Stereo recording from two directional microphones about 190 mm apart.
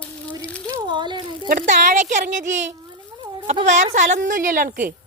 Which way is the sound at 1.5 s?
40° right (ahead or behind).